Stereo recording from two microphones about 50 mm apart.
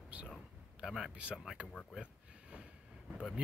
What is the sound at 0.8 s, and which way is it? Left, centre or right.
Speech, centre.